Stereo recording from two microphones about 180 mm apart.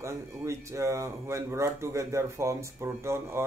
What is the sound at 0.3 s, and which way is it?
Speech, 15° right (ahead or behind).